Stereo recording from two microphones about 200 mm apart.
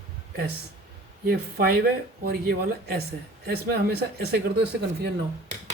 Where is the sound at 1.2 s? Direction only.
50° right (ahead or behind).